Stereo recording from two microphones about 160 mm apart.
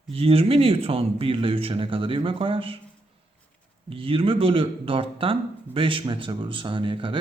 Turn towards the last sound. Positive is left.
turn(degrees=-30)  # may be behind; listen again after turning